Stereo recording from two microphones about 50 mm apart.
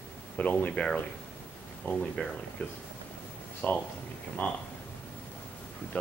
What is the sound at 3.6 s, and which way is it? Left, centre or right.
Speech, left.